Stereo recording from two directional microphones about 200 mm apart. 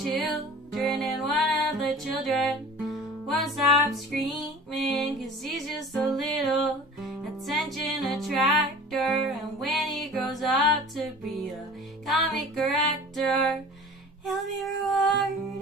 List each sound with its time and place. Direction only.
0.0 s music: centre (ahead or behind)
12.1 s music: centre (ahead or behind)